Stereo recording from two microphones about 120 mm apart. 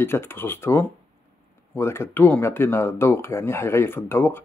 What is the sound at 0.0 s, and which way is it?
Speech, 20° left (ahead or behind).